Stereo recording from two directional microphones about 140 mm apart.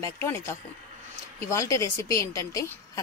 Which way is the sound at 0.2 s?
20° left (ahead or behind).